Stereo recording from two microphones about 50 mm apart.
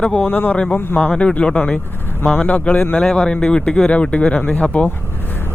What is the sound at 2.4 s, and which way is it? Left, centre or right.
Speech, left.